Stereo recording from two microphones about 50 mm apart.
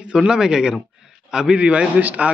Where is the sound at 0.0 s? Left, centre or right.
Centre.